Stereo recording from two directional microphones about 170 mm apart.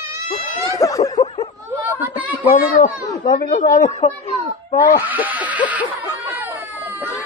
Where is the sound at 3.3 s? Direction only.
45° left (ahead or behind).